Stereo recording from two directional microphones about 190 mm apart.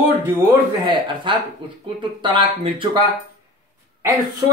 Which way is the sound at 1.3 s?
25° right (ahead or behind).